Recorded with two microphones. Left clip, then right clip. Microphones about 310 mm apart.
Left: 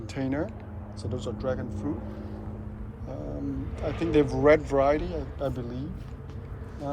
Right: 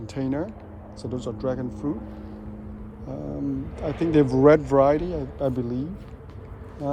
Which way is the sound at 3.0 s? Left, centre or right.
Right.